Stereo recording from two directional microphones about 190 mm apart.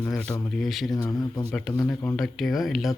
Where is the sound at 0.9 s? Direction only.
20° left (ahead or behind).